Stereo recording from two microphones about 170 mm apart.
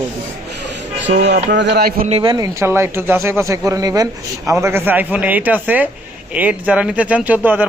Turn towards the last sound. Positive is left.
turn(degrees=-10)  # may be behind; listen again after turning